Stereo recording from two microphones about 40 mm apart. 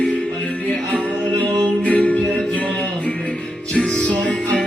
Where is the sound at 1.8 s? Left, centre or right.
Left.